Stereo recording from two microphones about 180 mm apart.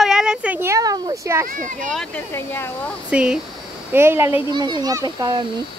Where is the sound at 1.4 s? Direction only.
50° right (ahead or behind).